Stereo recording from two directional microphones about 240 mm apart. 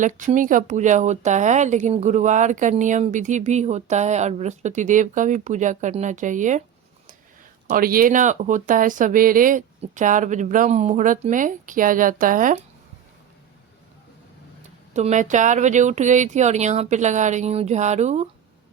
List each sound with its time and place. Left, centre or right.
0.0 s speech: right
7.7 s speech: right
14.9 s speech: right